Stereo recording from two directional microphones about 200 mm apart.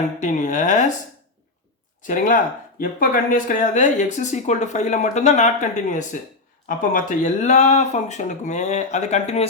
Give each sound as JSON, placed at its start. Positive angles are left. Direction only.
{"t": 0.2, "sound": "speech", "side_deg": 40}
{"t": 2.0, "sound": "speech", "side_deg": 40}